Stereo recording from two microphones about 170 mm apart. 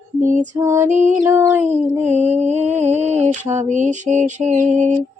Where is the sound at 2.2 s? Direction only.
40° right (ahead or behind).